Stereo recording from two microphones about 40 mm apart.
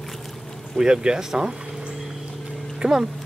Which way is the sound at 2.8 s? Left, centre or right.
Right.